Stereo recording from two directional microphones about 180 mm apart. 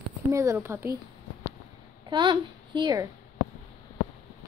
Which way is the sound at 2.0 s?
25° right (ahead or behind).